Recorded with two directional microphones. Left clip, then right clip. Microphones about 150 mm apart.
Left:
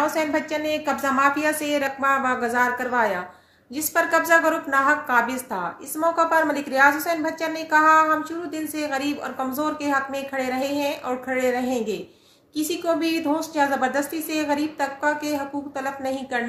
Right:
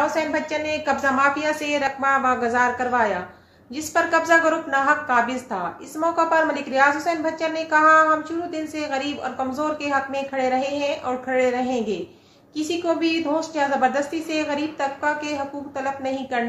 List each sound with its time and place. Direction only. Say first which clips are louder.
0.0 s a woman's voice: right 1 dB; 15° left (ahead or behind)